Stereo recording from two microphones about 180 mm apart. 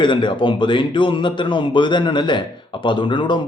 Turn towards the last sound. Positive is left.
turn(degrees=25)  # may be behind; listen again after turning